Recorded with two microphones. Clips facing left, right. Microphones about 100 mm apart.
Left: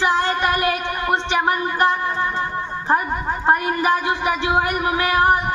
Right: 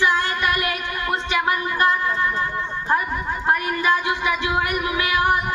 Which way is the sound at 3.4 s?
30° left (ahead or behind).